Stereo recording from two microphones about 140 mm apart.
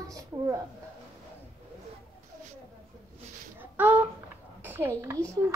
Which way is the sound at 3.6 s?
10° right (ahead or behind).